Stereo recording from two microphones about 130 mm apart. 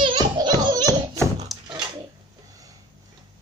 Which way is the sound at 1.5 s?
Centre (ahead or behind).